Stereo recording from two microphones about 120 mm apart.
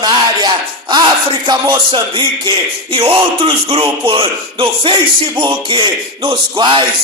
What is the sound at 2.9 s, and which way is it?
Speech, 50° right (ahead or behind).